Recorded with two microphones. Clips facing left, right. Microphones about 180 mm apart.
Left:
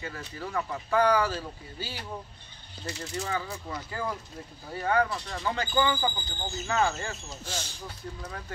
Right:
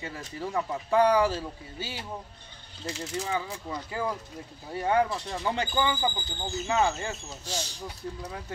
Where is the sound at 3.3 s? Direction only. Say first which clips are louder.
Right 1 dB; 15° right (ahead or behind).